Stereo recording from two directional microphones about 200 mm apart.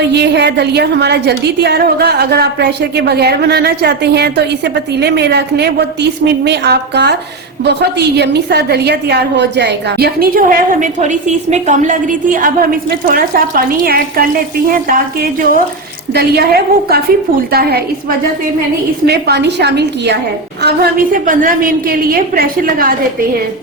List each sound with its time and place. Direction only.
0.0 s a woman's voice: 55° right (ahead or behind)
19.0 s a woman's voice: 55° right (ahead or behind)